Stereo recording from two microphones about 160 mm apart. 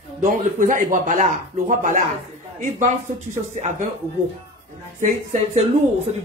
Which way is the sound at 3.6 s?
50° right (ahead or behind).